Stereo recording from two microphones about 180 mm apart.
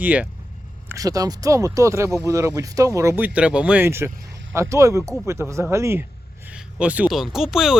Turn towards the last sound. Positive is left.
turn(degrees=0)  # may be behind; listen again after turning